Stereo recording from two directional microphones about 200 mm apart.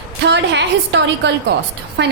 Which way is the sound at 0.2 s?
60° right (ahead or behind).